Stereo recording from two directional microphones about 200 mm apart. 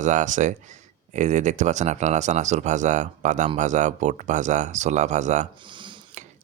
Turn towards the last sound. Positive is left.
turn(degrees=-35)  # may be behind; listen again after turning